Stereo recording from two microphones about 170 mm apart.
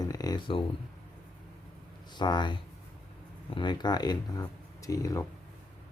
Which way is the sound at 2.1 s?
25° left (ahead or behind).